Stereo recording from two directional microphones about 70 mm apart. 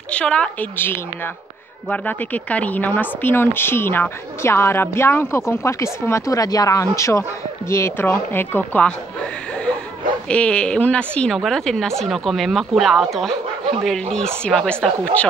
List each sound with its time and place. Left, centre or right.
0.1 s a woman's voice: centre
0.7 s speech: left
8.1 s speech: left
10.2 s a woman's voice: centre
11.3 s a woman's voice: centre